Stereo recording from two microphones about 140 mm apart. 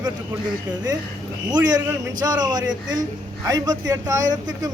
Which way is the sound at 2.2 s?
30° right (ahead or behind).